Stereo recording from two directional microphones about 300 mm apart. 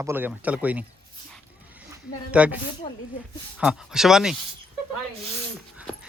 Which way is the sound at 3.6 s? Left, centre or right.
Centre.